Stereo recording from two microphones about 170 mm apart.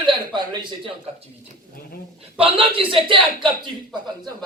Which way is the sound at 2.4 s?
30° right (ahead or behind).